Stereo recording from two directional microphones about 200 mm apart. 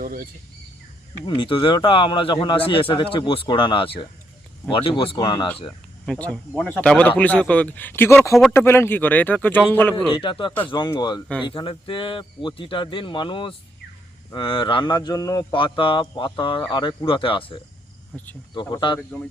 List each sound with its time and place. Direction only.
0.0 s speech: 45° right (ahead or behind)
1.2 s speech: 25° left (ahead or behind)
6.1 s speech: 5° left (ahead or behind)
10.2 s speech: 25° left (ahead or behind)
18.1 s cricket: 5° left (ahead or behind)
18.6 s speech: 20° left (ahead or behind)